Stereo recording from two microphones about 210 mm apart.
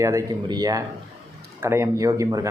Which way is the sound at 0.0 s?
15° right (ahead or behind).